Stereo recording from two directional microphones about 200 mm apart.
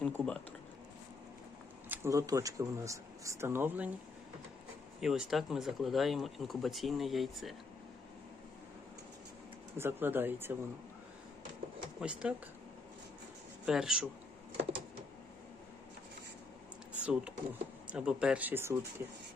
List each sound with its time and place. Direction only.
0.0 s speech: 5° left (ahead or behind)
1.9 s speech: 15° right (ahead or behind)
4.9 s speech: 5° right (ahead or behind)
9.7 s speech: 10° right (ahead or behind)
11.9 s speech: 5° right (ahead or behind)
13.7 s speech: 5° right (ahead or behind)
16.9 s speech: 5° right (ahead or behind)